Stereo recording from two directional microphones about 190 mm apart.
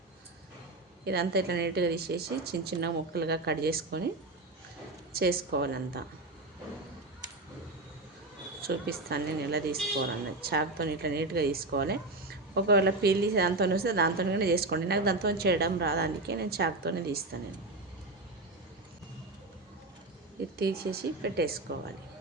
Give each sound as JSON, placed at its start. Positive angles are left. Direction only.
{"t": 1.0, "sound": "a woman's voice", "side_deg": -60}
{"t": 5.1, "sound": "a woman's voice", "side_deg": -55}
{"t": 8.6, "sound": "a woman's voice", "side_deg": -55}
{"t": 20.6, "sound": "a woman's voice", "side_deg": -55}